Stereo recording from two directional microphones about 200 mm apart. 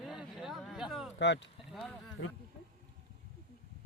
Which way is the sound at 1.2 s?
60° left (ahead or behind).